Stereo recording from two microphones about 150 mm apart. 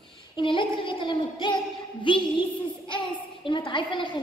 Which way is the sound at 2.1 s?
30° left (ahead or behind).